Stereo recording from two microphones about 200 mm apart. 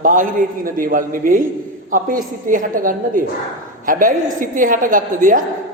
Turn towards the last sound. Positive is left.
turn(degrees=-40)  # may be behind; listen again after turning